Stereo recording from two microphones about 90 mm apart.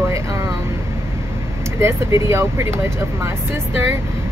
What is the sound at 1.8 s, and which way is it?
Speech, 30° right (ahead or behind).